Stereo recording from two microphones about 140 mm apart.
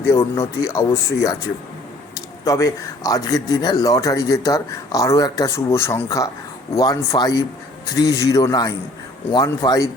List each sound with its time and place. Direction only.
0.1 s speech: 20° left (ahead or behind)
2.4 s speech: 25° left (ahead or behind)